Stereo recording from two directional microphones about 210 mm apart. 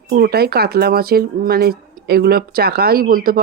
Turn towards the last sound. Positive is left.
turn(degrees=-45)  # may be behind; listen again after turning